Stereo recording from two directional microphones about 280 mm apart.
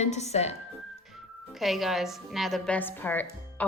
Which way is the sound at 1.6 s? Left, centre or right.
Centre.